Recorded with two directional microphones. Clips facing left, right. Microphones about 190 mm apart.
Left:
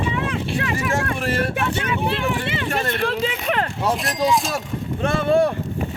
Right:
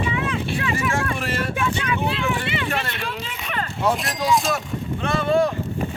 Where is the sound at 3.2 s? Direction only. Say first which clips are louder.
Left 7 dB; 80° left.